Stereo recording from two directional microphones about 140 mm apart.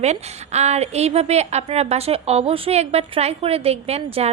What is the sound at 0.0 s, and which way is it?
A woman's voice, 50° right (ahead or behind).